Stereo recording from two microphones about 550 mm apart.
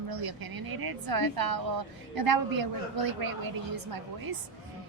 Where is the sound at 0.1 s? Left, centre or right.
Right.